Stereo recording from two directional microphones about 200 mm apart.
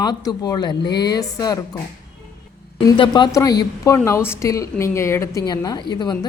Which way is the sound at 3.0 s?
20° left (ahead or behind).